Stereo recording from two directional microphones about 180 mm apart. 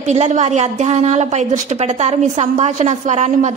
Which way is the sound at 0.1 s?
40° right (ahead or behind).